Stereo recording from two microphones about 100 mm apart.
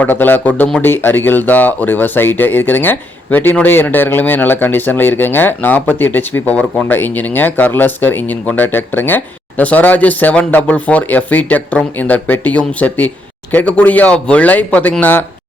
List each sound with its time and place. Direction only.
0.0 s speech: 20° left (ahead or behind)